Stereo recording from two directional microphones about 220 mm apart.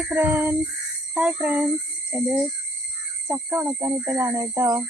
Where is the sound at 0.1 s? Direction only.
10° right (ahead or behind).